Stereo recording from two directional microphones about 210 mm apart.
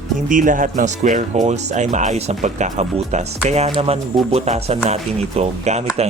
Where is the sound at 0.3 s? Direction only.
40° right (ahead or behind).